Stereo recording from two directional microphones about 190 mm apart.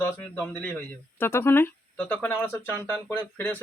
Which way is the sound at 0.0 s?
10° left (ahead or behind).